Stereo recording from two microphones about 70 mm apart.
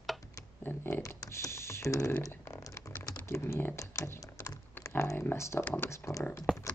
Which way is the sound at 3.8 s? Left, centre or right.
Left.